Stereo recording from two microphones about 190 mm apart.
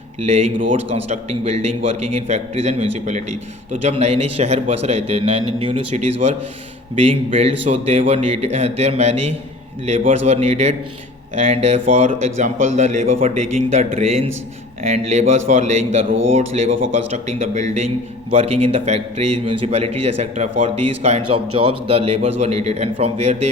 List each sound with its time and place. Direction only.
0.2 s a man's voice: 35° right (ahead or behind)